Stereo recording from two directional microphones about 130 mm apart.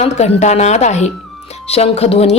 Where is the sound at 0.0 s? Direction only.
55° left (ahead or behind).